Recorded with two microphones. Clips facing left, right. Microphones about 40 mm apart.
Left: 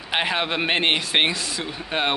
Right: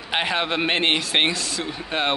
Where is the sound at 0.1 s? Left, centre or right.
Centre.